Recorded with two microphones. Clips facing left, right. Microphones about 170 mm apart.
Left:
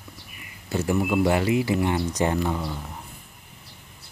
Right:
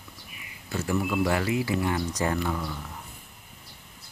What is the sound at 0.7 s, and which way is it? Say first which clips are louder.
Speech: left 4 dB; 25° left (ahead or behind).